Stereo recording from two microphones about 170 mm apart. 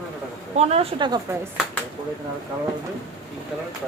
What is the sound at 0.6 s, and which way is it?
Speech, 40° right (ahead or behind).